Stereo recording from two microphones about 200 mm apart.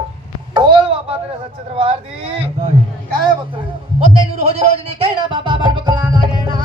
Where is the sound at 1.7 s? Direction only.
30° right (ahead or behind).